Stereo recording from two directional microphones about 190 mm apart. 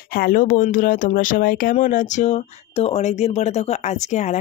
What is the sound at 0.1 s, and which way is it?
Speech, 50° left (ahead or behind).